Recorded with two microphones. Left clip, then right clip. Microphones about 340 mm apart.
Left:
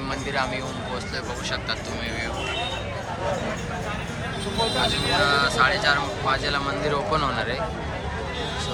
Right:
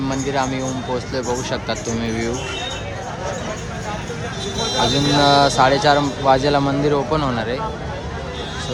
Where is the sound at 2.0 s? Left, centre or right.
Centre.